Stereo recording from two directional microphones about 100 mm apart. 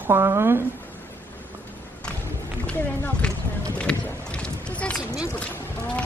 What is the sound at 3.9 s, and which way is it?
Boat, 10° left (ahead or behind).